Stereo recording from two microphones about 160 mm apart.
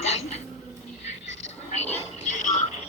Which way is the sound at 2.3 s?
45° left (ahead or behind).